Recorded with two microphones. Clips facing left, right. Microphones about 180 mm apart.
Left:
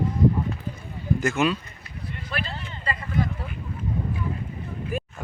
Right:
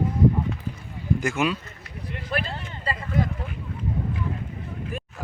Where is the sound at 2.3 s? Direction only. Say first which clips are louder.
Right 4 dB; 40° right (ahead or behind).